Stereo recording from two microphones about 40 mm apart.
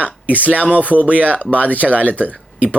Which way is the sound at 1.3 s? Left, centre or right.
Left.